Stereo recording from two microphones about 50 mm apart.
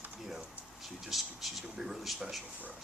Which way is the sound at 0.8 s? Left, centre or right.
Centre.